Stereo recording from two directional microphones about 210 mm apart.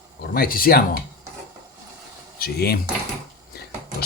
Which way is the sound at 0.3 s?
45° left (ahead or behind).